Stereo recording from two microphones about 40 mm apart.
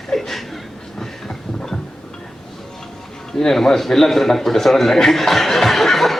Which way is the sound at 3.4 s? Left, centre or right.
Centre.